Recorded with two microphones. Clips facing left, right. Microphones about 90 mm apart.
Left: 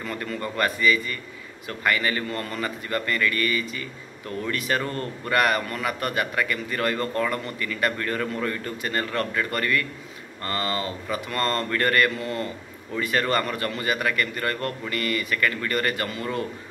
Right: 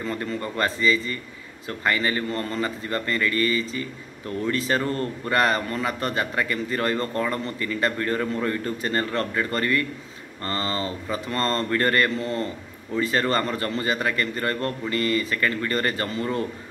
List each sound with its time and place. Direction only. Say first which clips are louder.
0.0 s a man's voice: right 2 dB; 25° right (ahead or behind)